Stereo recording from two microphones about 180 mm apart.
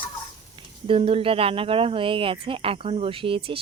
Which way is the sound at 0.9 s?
30° right (ahead or behind).